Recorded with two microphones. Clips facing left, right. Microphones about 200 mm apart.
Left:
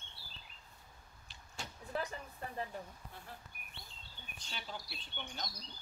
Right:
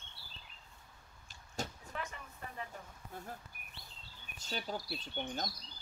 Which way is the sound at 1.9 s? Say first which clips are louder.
Left 5 dB; 35° left (ahead or behind).